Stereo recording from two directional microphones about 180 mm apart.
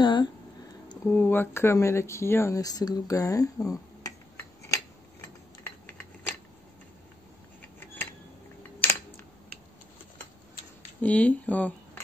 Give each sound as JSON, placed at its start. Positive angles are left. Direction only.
{"t": 0.0, "sound": "a sound", "side_deg": 25}
{"t": 0.8, "sound": "speech", "side_deg": 10}
{"t": 5.6, "sound": "typing", "side_deg": 10}
{"t": 7.6, "sound": "a sound", "side_deg": 10}
{"t": 8.8, "sound": "camera", "side_deg": 10}
{"t": 11.0, "sound": "speech", "side_deg": 10}